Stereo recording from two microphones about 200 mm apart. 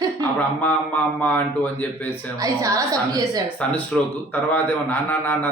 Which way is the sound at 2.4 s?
15° right (ahead or behind).